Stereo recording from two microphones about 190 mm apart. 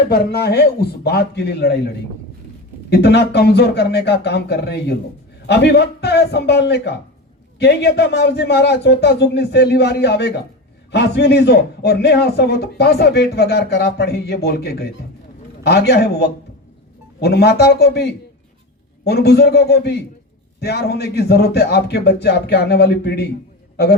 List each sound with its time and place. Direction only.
0.1 s a man's voice: 55° left (ahead or behind)
2.9 s a man's voice: 60° left (ahead or behind)